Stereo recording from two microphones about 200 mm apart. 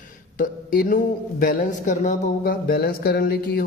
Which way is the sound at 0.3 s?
45° left (ahead or behind).